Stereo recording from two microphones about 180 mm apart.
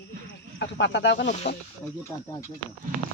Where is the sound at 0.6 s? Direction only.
85° left.